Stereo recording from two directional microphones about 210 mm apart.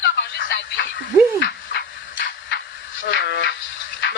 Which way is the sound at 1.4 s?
55° left (ahead or behind).